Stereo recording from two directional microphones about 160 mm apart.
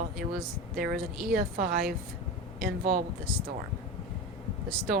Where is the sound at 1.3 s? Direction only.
60° right (ahead or behind).